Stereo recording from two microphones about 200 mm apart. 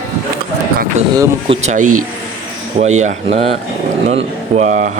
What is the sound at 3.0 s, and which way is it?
Speech, 35° right (ahead or behind).